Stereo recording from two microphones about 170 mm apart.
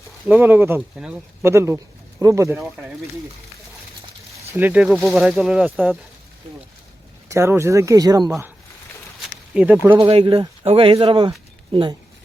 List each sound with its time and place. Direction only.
0.3 s speech: 10° right (ahead or behind)
2.6 s speech: 5° right (ahead or behind)
4.5 s speech: 10° right (ahead or behind)
7.3 s speech: 15° right (ahead or behind)
9.2 s speech: 5° right (ahead or behind)
10.0 s speech: 30° right (ahead or behind)